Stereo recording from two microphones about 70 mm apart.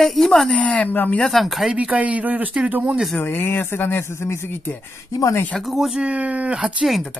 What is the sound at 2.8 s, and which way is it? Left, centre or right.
Speech, centre.